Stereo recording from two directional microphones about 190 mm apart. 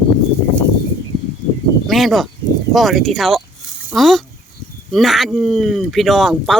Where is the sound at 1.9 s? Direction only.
Centre (ahead or behind).